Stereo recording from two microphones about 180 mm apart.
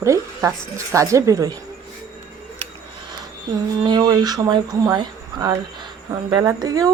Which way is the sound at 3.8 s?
20° right (ahead or behind).